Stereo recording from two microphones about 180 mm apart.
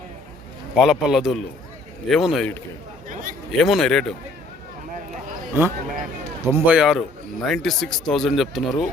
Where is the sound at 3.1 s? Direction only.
45° right (ahead or behind).